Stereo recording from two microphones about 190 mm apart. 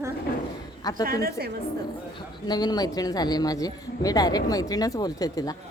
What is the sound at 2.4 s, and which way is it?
Speech, 20° left (ahead or behind).